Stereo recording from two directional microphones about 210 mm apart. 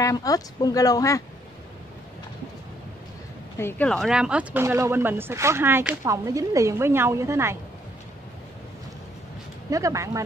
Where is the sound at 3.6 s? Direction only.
10° left (ahead or behind); by 7.6 s 10° right (ahead or behind).